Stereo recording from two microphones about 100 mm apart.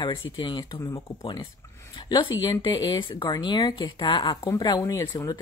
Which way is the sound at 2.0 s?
45° left (ahead or behind).